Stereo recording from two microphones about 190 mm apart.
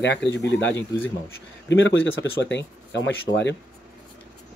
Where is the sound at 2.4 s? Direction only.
65° left (ahead or behind).